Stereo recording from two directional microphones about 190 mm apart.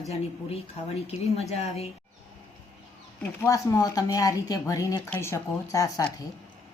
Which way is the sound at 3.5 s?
20° left (ahead or behind).